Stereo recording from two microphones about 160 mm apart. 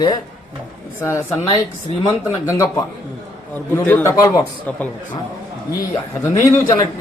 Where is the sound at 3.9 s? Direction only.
10° left (ahead or behind).